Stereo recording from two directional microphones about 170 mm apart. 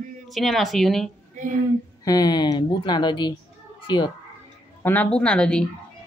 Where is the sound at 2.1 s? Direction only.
25° left (ahead or behind).